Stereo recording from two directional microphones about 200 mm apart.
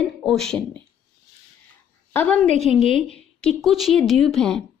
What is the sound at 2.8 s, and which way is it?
Speech, 35° right (ahead or behind).